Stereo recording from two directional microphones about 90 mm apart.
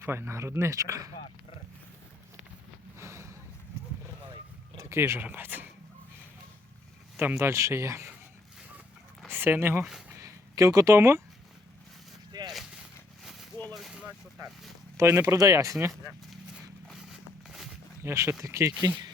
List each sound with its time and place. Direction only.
0.0 s speech: 25° right (ahead or behind)
3.0 s a sound: 30° right (ahead or behind)
4.8 s speech: 30° right (ahead or behind)
7.2 s speech: 25° right (ahead or behind)
9.3 s speech: 25° right (ahead or behind)
10.2 s a sound: 35° right (ahead or behind)
12.3 s a sound: 45° right (ahead or behind)
13.7 s vehicle: centre (ahead or behind)
14.4 s speech: 40° right (ahead or behind)
16.9 s a sound: 5° right (ahead or behind)
18.0 s speech: 30° right (ahead or behind)
18.9 s speech: 50° right (ahead or behind)